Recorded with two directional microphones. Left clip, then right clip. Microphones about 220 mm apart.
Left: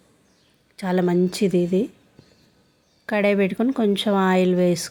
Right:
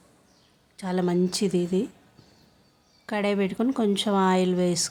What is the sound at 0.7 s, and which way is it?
A woman's voice, 15° left (ahead or behind).